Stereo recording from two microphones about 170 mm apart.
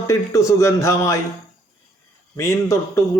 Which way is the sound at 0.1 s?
15° left (ahead or behind).